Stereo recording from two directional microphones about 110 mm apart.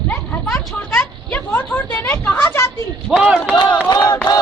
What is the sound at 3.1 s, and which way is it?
Speech, 10° right (ahead or behind).